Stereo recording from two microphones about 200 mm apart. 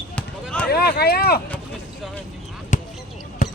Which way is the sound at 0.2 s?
5° left (ahead or behind).